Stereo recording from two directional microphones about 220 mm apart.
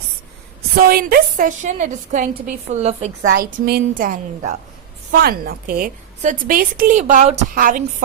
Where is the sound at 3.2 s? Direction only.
45° right (ahead or behind).